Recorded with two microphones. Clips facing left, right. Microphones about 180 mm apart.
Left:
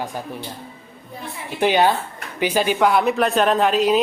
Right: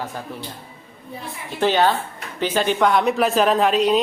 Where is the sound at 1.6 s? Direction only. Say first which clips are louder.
Left 1 dB; 15° left (ahead or behind).